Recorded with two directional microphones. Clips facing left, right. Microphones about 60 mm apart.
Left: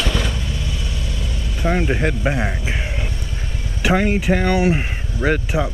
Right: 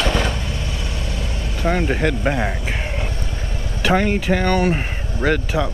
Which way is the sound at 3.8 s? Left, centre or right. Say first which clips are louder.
Even; centre.